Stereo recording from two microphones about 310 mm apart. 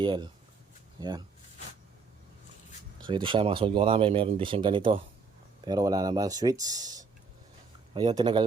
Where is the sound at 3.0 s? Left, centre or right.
Centre.